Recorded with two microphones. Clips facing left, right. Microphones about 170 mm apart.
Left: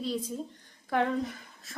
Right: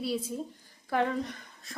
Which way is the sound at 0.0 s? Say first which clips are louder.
Right 1 dB; 10° right (ahead or behind).